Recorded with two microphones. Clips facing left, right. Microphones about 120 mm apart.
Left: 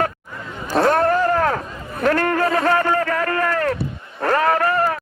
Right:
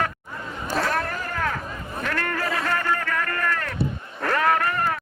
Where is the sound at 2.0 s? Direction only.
45° left (ahead or behind).